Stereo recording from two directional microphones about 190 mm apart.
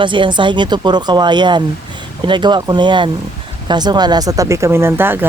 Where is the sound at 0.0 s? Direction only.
25° right (ahead or behind).